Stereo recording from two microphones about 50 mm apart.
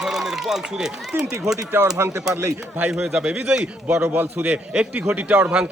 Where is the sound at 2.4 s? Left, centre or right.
Right.